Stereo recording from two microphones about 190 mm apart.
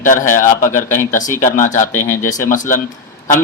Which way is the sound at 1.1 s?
40° left (ahead or behind).